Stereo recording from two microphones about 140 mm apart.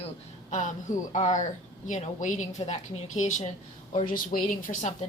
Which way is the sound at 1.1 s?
55° left (ahead or behind).